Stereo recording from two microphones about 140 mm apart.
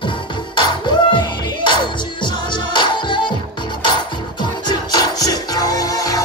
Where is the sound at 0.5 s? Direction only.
35° left (ahead or behind).